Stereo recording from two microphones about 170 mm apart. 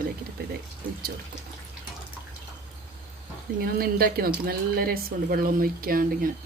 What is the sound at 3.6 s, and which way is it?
Speech, 60° right (ahead or behind).